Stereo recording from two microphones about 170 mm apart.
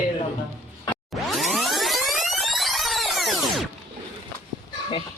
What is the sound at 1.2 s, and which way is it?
Music, centre (ahead or behind).